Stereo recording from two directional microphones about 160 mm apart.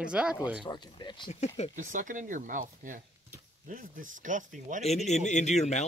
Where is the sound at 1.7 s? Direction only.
55° right (ahead or behind).